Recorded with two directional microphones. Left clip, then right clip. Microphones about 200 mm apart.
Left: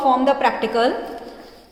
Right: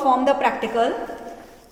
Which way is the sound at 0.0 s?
Centre (ahead or behind).